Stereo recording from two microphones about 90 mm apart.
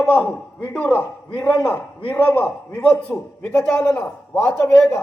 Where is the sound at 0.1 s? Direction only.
20° left (ahead or behind).